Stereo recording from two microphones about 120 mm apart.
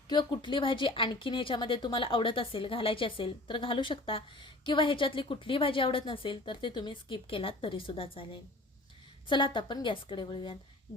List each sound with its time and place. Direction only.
0.1 s a woman's voice: 40° left (ahead or behind)